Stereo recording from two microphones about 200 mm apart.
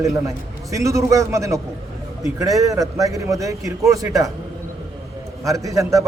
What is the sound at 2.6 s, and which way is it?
A man's voice, 15° right (ahead or behind).